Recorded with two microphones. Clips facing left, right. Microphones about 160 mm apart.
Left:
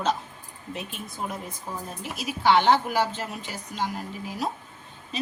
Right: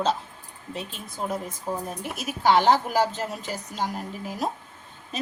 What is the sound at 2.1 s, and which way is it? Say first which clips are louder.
Speech: even; 50° right (ahead or behind).